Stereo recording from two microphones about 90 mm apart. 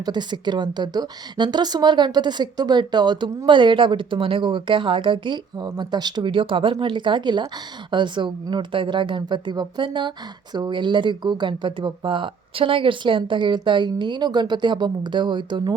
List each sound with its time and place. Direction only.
0.0 s a woman's voice: 55° right (ahead or behind)
5.6 s a woman's voice: 50° right (ahead or behind)